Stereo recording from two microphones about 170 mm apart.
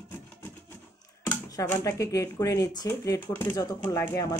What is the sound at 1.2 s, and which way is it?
Speech, 20° left (ahead or behind).